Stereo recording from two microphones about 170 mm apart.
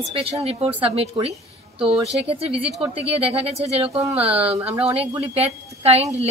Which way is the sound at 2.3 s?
35° right (ahead or behind).